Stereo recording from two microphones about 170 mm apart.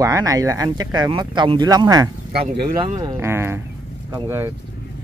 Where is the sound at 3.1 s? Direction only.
15° right (ahead or behind).